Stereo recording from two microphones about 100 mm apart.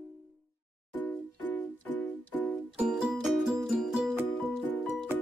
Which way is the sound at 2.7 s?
10° right (ahead or behind).